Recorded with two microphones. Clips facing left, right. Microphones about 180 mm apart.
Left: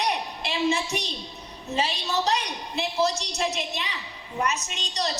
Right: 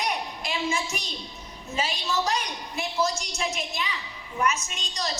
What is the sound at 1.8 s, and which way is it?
A woman's voice, 35° left (ahead or behind).